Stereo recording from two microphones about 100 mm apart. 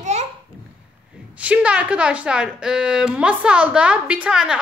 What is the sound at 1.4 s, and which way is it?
A woman's voice, 10° right (ahead or behind).